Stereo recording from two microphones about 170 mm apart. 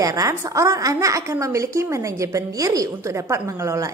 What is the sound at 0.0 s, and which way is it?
A woman's voice, 20° right (ahead or behind).